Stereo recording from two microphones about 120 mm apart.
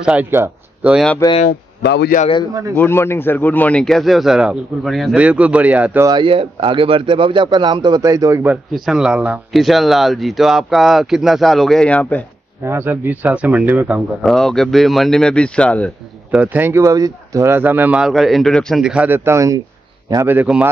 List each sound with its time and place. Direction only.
0.0 s speech: 10° right (ahead or behind)
1.2 s speech: 30° left (ahead or behind)
2.7 s speech: 20° left (ahead or behind); by 5.2 s centre (ahead or behind)
5.2 s speech: 10° right (ahead or behind)
6.0 s a man's voice: 40° right (ahead or behind)
8.7 s speech: 5° right (ahead or behind)
12.6 s speech: 20° right (ahead or behind)
14.2 s speech: 5° left (ahead or behind)
16.3 s speech: 15° right (ahead or behind); by 18.8 s 5° left (ahead or behind)
18.8 s speech: 10° right (ahead or behind); by 19.6 s 25° right (ahead or behind)
20.2 s speech: 10° right (ahead or behind)